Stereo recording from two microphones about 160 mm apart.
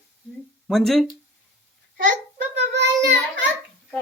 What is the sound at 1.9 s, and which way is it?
Child singing, 90° right.